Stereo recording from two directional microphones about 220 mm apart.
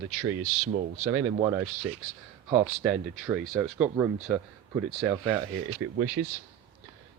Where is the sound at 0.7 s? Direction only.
40° right (ahead or behind).